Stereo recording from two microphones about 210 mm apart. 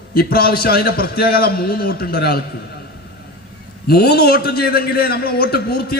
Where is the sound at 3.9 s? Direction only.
50° left (ahead or behind).